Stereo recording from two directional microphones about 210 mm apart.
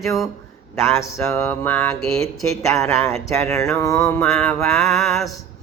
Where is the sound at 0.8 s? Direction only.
15° left (ahead or behind).